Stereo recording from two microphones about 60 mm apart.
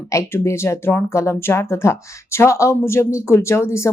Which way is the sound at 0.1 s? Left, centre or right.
Left.